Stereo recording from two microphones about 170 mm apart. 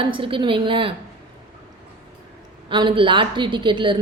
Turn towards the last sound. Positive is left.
turn(degrees=-30)  # may be behind; listen again after turning